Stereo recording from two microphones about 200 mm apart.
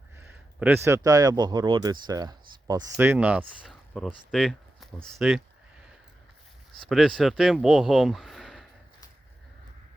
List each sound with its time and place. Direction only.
0.2 s speech: 10° right (ahead or behind)
6.8 s speech: centre (ahead or behind)